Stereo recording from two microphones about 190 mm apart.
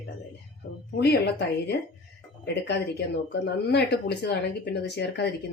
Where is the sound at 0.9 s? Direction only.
60° left (ahead or behind).